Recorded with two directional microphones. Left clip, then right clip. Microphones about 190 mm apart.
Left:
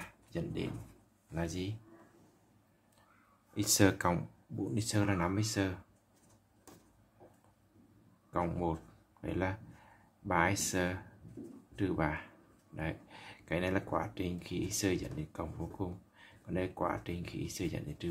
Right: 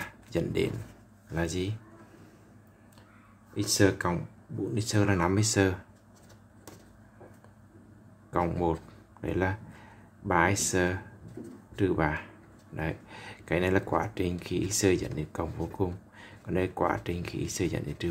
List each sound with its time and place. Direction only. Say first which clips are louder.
0.0 s a sound: right 10 dB; 20° right (ahead or behind)
1.3 s speech: right 7 dB; 15° right (ahead or behind)
3.5 s speech: right 4 dB; 5° left (ahead or behind)
4.7 s speech: right 6 dB; 5° right (ahead or behind)
8.3 s speech: right 7 dB; 10° right (ahead or behind)